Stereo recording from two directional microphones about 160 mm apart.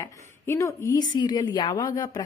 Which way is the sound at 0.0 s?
20° left (ahead or behind).